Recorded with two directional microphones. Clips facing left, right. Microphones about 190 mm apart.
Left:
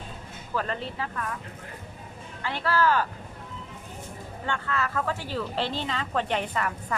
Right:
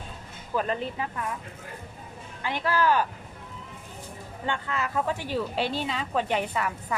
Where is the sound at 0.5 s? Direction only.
15° right (ahead or behind).